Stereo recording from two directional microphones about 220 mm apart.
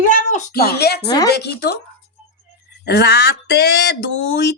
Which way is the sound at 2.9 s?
45° left (ahead or behind).